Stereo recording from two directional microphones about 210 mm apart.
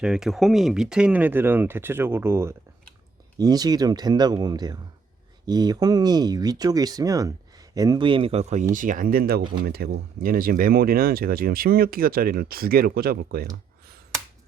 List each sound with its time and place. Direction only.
0.0 s speech: 5° right (ahead or behind); by 13.5 s 45° right (ahead or behind)